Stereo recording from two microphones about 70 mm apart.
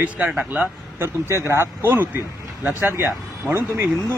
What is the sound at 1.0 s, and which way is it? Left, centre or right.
A man's voice, right.